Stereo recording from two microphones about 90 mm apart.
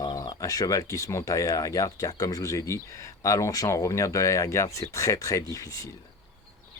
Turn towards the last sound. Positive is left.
turn(degrees=35)  # may be behind; listen again after turning